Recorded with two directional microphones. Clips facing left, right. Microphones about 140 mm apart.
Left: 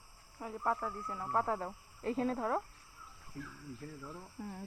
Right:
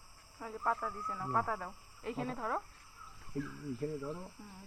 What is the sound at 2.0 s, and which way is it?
Speech, 40° left (ahead or behind).